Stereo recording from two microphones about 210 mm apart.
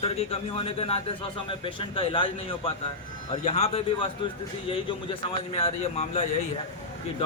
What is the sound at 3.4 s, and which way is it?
A man's voice, 30° left (ahead or behind).